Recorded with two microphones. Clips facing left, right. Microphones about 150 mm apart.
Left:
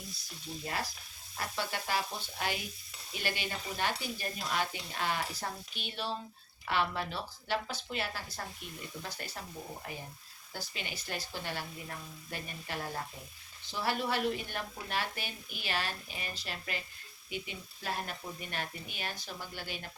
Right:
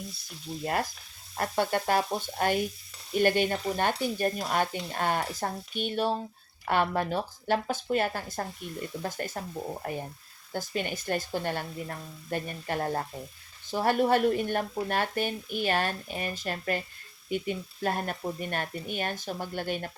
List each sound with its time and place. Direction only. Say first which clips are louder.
0.6 s frying: right 8 dB; 55° right (ahead or behind)
1.4 s speech: right 10 dB; 50° right (ahead or behind)